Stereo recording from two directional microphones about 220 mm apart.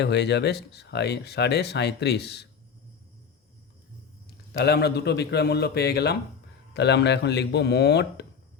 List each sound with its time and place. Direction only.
0.0 s speech: 50° left (ahead or behind)
4.5 s speech: 50° left (ahead or behind)